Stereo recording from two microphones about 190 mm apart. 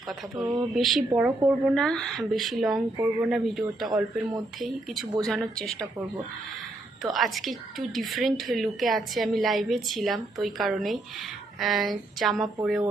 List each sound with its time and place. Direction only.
0.3 s speech: 20° right (ahead or behind)
0.7 s speech: centre (ahead or behind)
5.2 s speech: 5° left (ahead or behind)
7.0 s speech: centre (ahead or behind)